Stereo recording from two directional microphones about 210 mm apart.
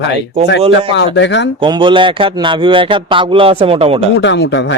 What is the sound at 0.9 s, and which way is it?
Speech, 60° left (ahead or behind).